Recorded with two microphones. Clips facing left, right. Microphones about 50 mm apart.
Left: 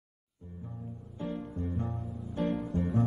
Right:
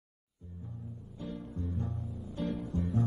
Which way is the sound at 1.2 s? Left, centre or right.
Left.